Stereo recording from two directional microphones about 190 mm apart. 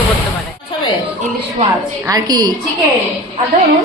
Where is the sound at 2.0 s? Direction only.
20° right (ahead or behind).